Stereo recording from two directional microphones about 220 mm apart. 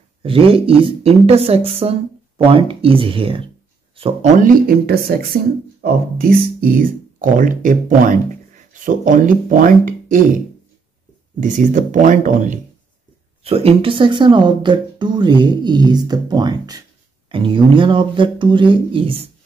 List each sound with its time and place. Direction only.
0.2 s speech: 25° right (ahead or behind)
4.4 s speech: 40° right (ahead or behind)
11.3 s speech: 35° right (ahead or behind)